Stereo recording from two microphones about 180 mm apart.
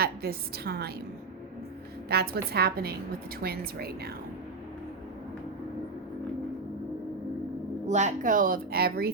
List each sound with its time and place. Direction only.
0.0 s a woman's voice: 60° right (ahead or behind)
2.0 s a woman's voice: 60° right (ahead or behind)
7.9 s a woman's voice: 40° right (ahead or behind); by 9.1 s 60° right (ahead or behind)